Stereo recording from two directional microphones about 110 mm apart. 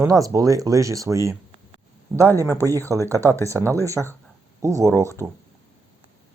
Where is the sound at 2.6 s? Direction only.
30° right (ahead or behind).